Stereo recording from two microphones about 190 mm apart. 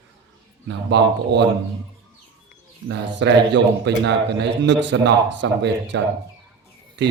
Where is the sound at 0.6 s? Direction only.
65° right (ahead or behind).